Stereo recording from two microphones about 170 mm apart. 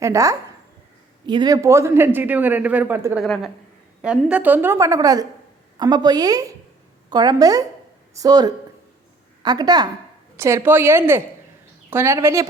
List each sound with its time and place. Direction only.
0.0 s a woman's voice: 20° right (ahead or behind)
3.2 s a woman's voice: centre (ahead or behind); by 12.5 s 15° right (ahead or behind)